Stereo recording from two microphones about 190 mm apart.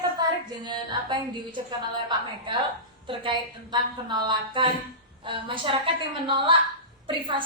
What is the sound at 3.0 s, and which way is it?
A woman's voice, 25° right (ahead or behind).